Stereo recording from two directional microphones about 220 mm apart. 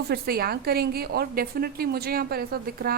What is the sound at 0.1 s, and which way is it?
A woman's voice, 45° right (ahead or behind).